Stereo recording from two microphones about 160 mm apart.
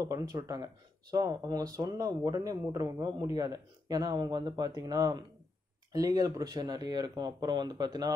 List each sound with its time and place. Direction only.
0.0 s speech: 20° right (ahead or behind)